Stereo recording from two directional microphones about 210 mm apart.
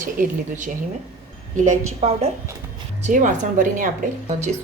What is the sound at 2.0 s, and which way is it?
A woman's voice, 30° right (ahead or behind).